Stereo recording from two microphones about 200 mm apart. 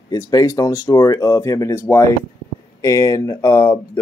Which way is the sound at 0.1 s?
20° left (ahead or behind).